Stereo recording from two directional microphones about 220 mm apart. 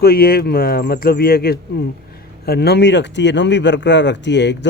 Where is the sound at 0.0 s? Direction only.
45° left (ahead or behind).